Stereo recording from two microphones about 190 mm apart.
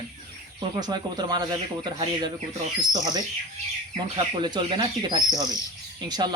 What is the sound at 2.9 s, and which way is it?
Speech, 20° right (ahead or behind).